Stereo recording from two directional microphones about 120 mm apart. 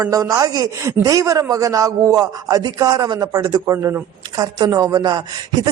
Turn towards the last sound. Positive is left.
turn(degrees=-35)  # may be behind; listen again after turning